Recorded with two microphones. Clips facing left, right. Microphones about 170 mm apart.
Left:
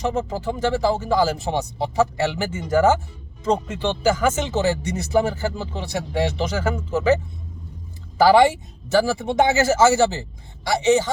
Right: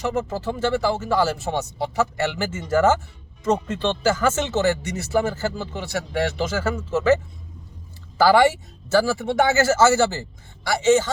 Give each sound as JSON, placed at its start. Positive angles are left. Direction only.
{"t": 0.1, "sound": "speech", "side_deg": 15}
{"t": 8.2, "sound": "speech", "side_deg": 15}